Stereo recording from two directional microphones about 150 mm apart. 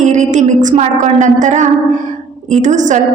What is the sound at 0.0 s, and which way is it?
A woman's voice, 55° right (ahead or behind).